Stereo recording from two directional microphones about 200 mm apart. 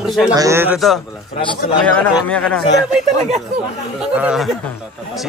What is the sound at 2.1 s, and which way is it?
Speech, 5° left (ahead or behind).